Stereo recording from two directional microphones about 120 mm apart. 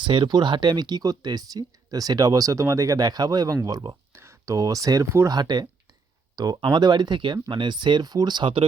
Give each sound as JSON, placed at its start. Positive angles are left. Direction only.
{"t": 0.0, "sound": "speech", "side_deg": -40}